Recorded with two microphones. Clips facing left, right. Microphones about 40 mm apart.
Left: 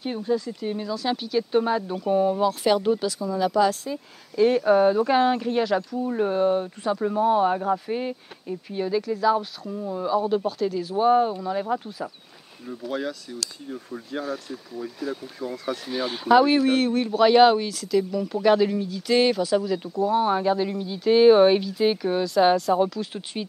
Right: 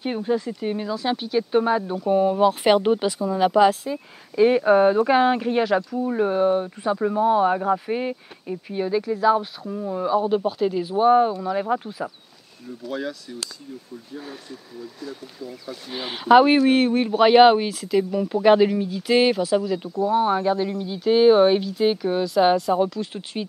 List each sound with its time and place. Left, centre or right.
0.0 s speech: right
2.4 s speech: right
3.8 s speech: centre
7.5 s speech: centre
12.8 s speech: centre
15.4 s speech: left
15.9 s speech: right; by 23.4 s centre